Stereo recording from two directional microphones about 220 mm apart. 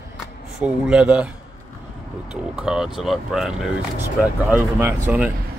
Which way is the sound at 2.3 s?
5° right (ahead or behind).